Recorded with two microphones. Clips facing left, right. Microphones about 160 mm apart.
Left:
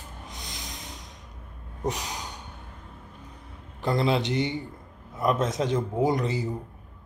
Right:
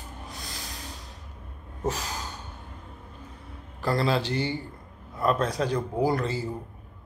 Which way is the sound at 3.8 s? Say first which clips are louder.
Left 1 dB; 20° left (ahead or behind).